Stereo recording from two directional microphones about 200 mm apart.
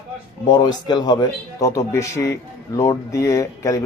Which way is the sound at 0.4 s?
20° left (ahead or behind).